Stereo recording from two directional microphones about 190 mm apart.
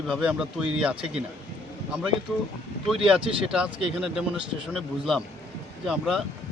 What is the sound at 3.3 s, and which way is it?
Speech, 25° right (ahead or behind).